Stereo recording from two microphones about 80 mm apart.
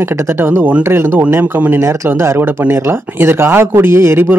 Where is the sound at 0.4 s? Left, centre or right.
Right.